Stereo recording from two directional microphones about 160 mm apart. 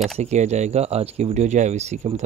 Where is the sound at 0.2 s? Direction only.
45° right (ahead or behind).